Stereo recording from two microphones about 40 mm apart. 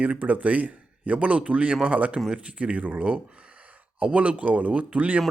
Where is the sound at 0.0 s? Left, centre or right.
Right.